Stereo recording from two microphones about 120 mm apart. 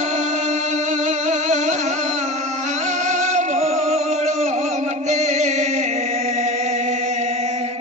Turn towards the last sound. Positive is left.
turn(degrees=-75)  # may be behind; listen again after turning